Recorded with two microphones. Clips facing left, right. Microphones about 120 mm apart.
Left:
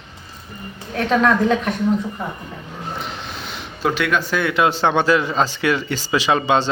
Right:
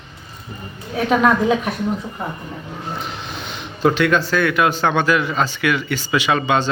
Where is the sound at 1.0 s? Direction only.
10° right (ahead or behind).